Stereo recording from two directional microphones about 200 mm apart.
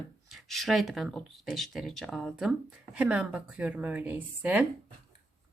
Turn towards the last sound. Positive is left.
turn(degrees=-5)  # may be behind; listen again after turning